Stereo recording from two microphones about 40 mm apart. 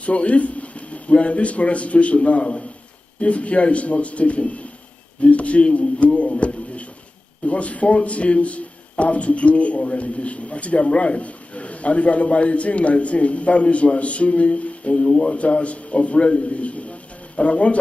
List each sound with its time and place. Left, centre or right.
0.0 s a man's voice: left